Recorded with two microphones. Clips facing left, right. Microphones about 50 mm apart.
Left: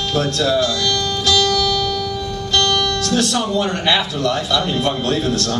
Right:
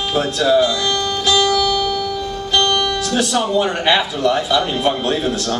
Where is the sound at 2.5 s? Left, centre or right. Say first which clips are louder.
Right 1 dB; centre.